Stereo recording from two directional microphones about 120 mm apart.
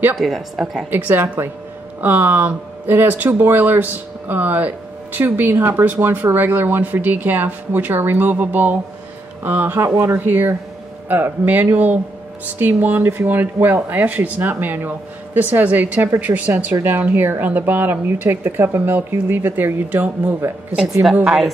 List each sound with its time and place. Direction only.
0.2 s a woman's voice: centre (ahead or behind)
0.8 s speech: 15° right (ahead or behind)
21.0 s a woman's voice: 5° right (ahead or behind)